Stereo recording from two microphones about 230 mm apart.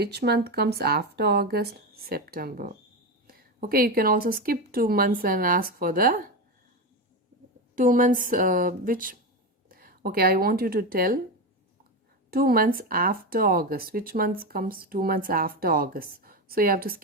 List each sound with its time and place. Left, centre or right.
0.0 s speech: right
7.8 s speech: right
12.3 s speech: right